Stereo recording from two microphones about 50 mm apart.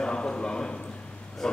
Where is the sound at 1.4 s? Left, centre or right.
Centre.